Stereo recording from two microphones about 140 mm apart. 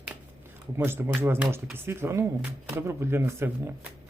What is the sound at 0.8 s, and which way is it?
Speech, 15° right (ahead or behind).